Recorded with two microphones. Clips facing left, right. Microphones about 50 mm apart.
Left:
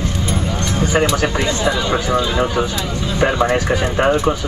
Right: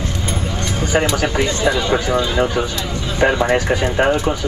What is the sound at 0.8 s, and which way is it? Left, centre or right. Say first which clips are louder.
Speech: left 1 dB; centre.